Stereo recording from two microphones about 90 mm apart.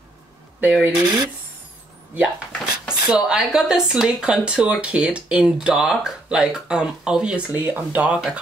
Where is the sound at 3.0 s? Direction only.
10° right (ahead or behind).